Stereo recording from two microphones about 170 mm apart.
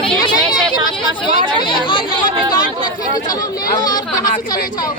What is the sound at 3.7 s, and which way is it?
Speech, 25° left (ahead or behind).